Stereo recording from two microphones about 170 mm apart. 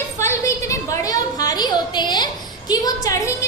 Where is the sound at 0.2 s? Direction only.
15° left (ahead or behind).